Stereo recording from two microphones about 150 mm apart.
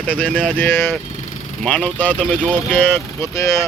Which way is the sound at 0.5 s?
15° left (ahead or behind).